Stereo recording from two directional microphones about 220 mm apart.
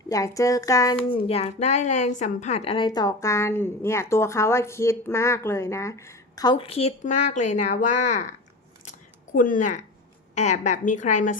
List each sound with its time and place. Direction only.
0.1 s speech: 15° left (ahead or behind)
1.1 s a woman's voice: 25° left (ahead or behind)
8.8 s scissors: 35° left (ahead or behind)
10.3 s a woman's voice: 30° left (ahead or behind)